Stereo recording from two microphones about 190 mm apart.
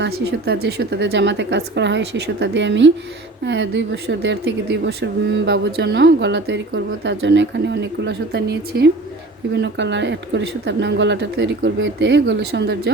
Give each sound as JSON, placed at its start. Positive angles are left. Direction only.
{"t": 0.0, "sound": "speech", "side_deg": -60}
{"t": 9.5, "sound": "speech", "side_deg": -70}